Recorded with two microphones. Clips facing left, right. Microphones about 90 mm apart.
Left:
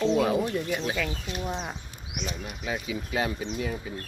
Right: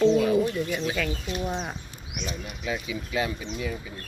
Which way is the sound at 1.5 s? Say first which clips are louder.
Even; 10° right (ahead or behind).